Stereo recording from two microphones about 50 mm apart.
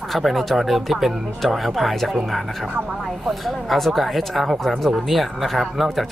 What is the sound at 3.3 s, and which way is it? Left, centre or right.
Speech, centre.